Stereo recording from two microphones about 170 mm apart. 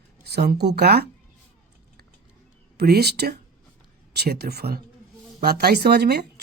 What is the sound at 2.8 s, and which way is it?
A woman's voice, 70° right (ahead or behind).